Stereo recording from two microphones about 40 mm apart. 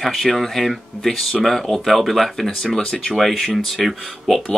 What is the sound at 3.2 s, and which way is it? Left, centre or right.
Speech, centre.